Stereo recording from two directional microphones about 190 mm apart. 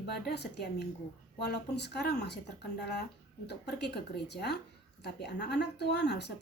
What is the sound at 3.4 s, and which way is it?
A woman's voice, 60° left (ahead or behind).